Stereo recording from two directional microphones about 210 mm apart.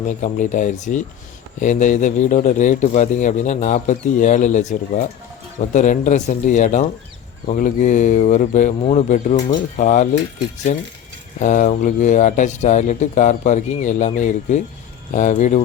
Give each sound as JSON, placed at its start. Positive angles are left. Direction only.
{"t": 0.2, "sound": "speech", "side_deg": 35}